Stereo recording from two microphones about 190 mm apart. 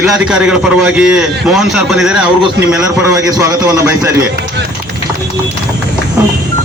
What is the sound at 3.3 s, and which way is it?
Speech, 20° right (ahead or behind).